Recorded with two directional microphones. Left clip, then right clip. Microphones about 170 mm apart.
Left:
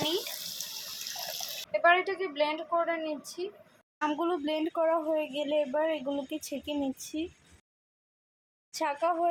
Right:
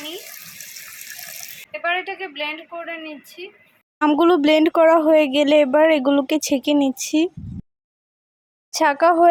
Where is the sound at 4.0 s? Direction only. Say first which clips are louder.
Right 15 dB; 65° right (ahead or behind).